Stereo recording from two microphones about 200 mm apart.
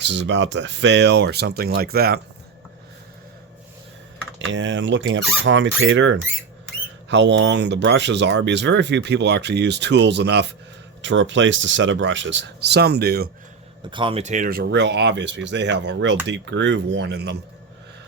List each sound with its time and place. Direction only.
0.0 s speech: 60° right (ahead or behind)
4.4 s speech: 70° right (ahead or behind); by 13.3 s 50° right (ahead or behind)
13.8 s speech: 25° right (ahead or behind); by 17.3 s 55° right (ahead or behind)